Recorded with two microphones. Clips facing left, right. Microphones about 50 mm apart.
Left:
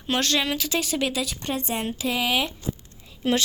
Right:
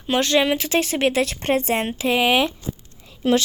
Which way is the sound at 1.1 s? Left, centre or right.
Right.